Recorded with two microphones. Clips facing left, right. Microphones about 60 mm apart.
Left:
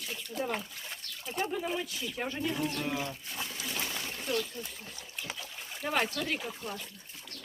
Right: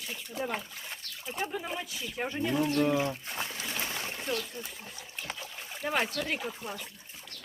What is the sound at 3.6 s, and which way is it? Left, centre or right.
Trickle, right.